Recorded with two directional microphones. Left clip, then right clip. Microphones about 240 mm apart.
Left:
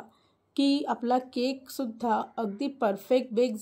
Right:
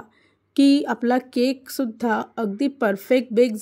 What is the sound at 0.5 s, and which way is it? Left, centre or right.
A woman's voice, right.